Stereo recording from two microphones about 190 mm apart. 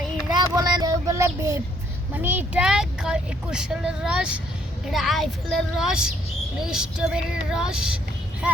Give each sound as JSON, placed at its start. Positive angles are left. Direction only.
{"t": 0.3, "sound": "child singing", "side_deg": -20}
{"t": 2.1, "sound": "speech", "side_deg": -10}